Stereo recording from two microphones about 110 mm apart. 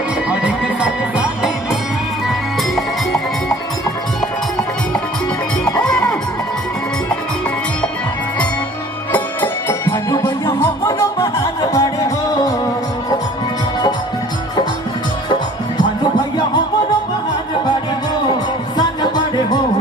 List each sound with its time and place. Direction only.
0.3 s music: 10° right (ahead or behind)
5.7 s music: 10° left (ahead or behind)
9.1 s music: 20° left (ahead or behind)
11.7 s music: 30° left (ahead or behind)